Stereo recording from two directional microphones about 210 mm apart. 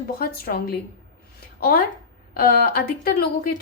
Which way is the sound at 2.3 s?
45° left (ahead or behind).